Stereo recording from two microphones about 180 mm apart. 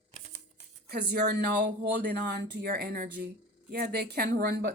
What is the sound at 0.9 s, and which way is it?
Speech, 65° right (ahead or behind).